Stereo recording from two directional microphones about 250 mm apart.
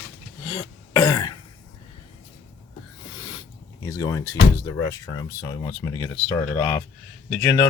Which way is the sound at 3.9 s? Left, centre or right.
Centre.